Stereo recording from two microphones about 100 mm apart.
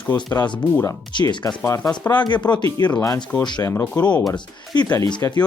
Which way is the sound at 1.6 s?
30° left (ahead or behind).